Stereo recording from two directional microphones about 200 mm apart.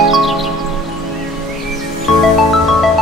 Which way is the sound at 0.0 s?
Centre (ahead or behind).